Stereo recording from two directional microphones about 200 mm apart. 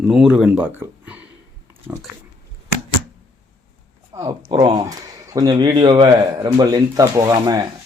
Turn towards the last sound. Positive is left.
turn(degrees=-20)  # may be behind; listen again after turning